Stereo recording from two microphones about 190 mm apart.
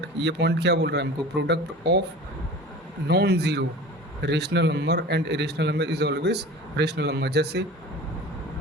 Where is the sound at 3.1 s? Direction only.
55° right (ahead or behind).